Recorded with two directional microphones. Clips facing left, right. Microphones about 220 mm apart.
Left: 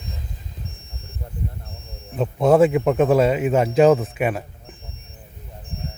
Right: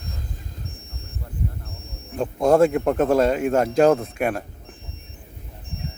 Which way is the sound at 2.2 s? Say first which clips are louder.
Left 1 dB; 5° left (ahead or behind).